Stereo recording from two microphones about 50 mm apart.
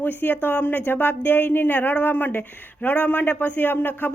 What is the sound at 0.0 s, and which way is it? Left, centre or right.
Speech, left.